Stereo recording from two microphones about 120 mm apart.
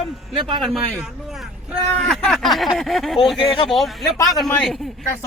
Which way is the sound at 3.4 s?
45° left (ahead or behind).